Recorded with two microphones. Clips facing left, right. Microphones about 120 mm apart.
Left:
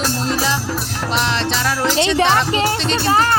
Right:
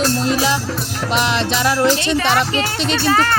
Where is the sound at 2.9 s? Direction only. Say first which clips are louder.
Right 1 dB; 20° left (ahead or behind).